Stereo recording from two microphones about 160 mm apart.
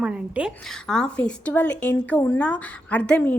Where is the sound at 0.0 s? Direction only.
5° right (ahead or behind).